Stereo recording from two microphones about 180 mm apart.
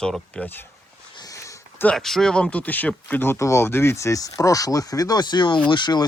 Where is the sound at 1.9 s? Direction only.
Centre (ahead or behind).